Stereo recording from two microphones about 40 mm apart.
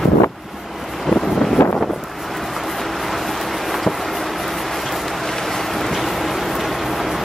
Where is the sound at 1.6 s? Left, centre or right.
Left.